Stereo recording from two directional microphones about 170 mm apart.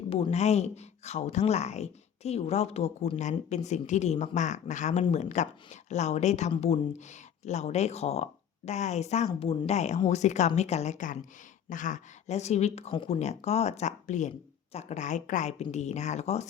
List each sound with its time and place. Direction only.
0.1 s speech: 35° left (ahead or behind)